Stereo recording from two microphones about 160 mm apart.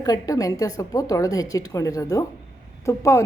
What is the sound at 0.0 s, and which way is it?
A woman's voice, 20° left (ahead or behind).